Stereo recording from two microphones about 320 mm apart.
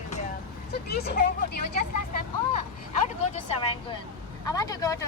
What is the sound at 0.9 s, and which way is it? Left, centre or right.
Vehicle, left.